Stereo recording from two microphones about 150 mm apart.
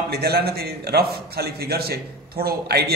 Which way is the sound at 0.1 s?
90° right.